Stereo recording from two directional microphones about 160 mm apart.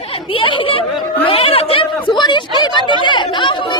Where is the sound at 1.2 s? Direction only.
35° left (ahead or behind).